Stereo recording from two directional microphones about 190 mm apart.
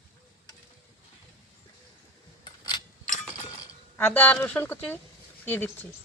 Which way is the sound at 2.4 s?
25° left (ahead or behind).